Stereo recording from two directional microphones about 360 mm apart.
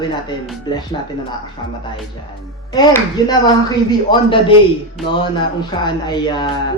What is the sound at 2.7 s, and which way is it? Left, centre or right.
Speech, centre.